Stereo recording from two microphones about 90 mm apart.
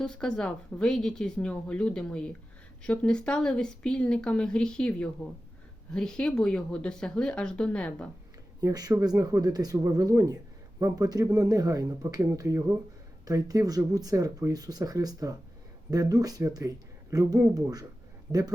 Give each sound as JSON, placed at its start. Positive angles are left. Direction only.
{"t": 0.0, "sound": "speech", "side_deg": 10}
{"t": 8.6, "sound": "speech", "side_deg": -45}